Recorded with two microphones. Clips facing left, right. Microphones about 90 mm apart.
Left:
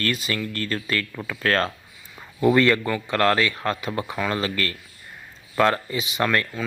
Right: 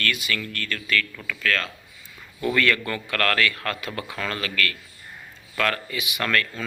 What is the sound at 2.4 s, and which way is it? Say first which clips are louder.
Speech: left 5 dB; 25° left (ahead or behind).